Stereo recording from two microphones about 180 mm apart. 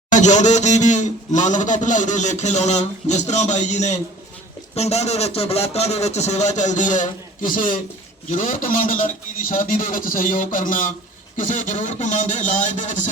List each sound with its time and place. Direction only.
0.1 s a man's voice: 40° left (ahead or behind)